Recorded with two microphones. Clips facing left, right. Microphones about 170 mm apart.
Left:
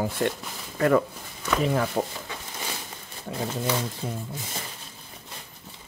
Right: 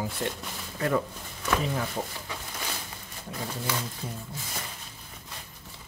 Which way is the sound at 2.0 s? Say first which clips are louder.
Left 6 dB; 70° left (ahead or behind).